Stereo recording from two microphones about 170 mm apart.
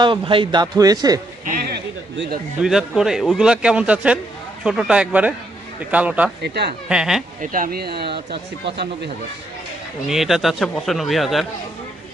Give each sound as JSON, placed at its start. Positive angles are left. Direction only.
{"t": 0.0, "sound": "a man's voice", "side_deg": -30}
{"t": 1.5, "sound": "a sound", "side_deg": -65}
{"t": 2.6, "sound": "speech", "side_deg": 0}
{"t": 6.4, "sound": "speech", "side_deg": -75}
{"t": 6.8, "sound": "speech", "side_deg": -5}
{"t": 7.4, "sound": "speech", "side_deg": -55}
{"t": 10.1, "sound": "speech", "side_deg": 0}